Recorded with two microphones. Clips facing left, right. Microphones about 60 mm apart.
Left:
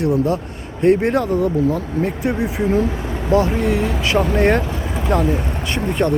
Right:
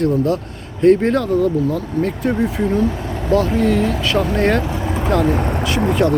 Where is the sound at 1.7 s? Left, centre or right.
Centre.